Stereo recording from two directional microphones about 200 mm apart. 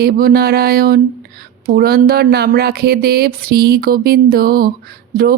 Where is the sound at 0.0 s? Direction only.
50° right (ahead or behind).